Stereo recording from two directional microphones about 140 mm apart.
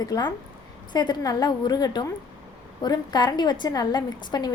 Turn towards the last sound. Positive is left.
turn(degrees=30)  # may be behind; listen again after turning